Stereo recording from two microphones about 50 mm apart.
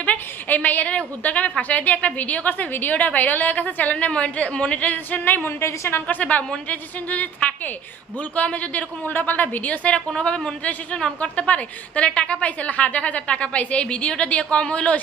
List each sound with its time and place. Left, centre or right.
0.0 s a woman's voice: left
3.9 s a woman's voice: left
8.4 s a woman's voice: left